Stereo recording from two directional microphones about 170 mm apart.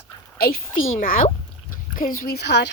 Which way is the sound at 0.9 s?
55° left (ahead or behind).